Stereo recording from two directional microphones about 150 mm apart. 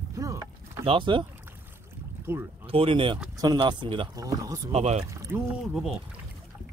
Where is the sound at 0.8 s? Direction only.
35° right (ahead or behind).